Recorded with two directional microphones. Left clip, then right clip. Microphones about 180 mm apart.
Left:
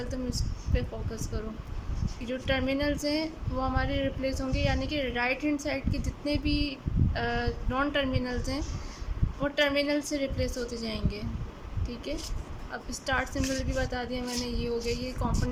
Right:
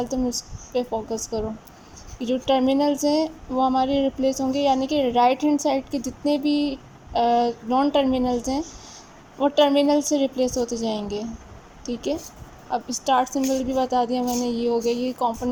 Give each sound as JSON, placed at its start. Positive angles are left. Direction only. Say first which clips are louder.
{"t": 0.1, "sound": "a woman's voice", "louder": "right 9 dB", "side_deg": -15}
{"t": 6.2, "sound": "female singing", "louder": "right 8 dB", "side_deg": -20}
{"t": 7.8, "sound": "speech", "louder": "right 8 dB", "side_deg": -20}
{"t": 12.7, "sound": "a woman's voice", "louder": "right 10 dB", "side_deg": -15}